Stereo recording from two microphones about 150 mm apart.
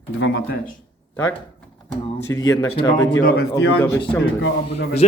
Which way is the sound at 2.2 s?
20° left (ahead or behind).